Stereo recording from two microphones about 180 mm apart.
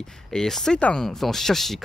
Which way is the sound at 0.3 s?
5° left (ahead or behind).